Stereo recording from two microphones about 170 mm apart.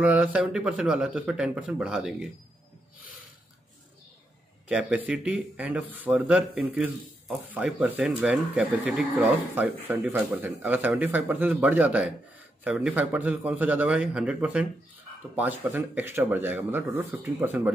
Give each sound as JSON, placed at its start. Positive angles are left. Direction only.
{"t": 0.0, "sound": "speech", "side_deg": -5}
{"t": 4.6, "sound": "speech", "side_deg": -5}